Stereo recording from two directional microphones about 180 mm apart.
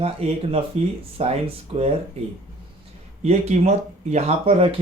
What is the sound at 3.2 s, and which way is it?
Speech, 35° right (ahead or behind).